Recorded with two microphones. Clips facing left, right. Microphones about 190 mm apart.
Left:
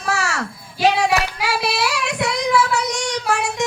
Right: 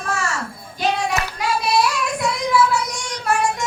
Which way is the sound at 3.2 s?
70° left (ahead or behind).